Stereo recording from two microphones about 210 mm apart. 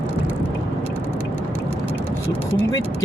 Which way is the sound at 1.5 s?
5° left (ahead or behind).